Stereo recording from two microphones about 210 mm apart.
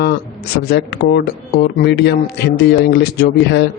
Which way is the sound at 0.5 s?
50° left (ahead or behind).